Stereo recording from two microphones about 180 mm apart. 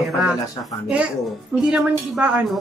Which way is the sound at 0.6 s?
20° left (ahead or behind).